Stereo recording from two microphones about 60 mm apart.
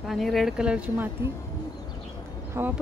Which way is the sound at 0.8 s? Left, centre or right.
Right.